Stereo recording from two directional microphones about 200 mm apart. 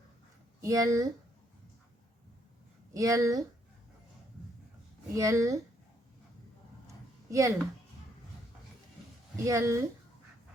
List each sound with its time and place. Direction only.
0.6 s speech: 15° right (ahead or behind)
2.9 s speech: 15° right (ahead or behind)
5.1 s speech: 15° right (ahead or behind)
7.3 s speech: 15° right (ahead or behind)
9.3 s speech: 15° right (ahead or behind)